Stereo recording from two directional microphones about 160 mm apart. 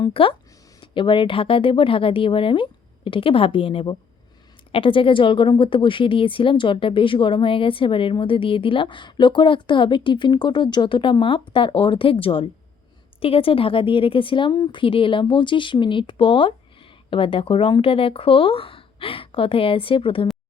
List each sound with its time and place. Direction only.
0.0 s a woman's voice: 35° left (ahead or behind)